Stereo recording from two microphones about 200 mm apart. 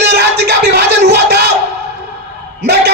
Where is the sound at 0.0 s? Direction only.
55° right (ahead or behind).